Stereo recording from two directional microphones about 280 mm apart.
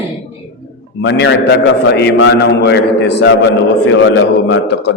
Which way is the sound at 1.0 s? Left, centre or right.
Left.